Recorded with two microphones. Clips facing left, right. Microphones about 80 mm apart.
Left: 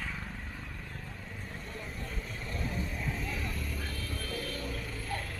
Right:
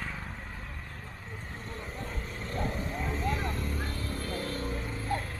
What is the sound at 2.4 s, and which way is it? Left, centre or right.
Vehicle, right.